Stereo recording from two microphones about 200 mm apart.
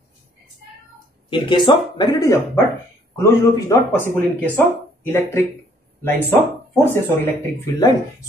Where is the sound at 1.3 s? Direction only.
25° left (ahead or behind).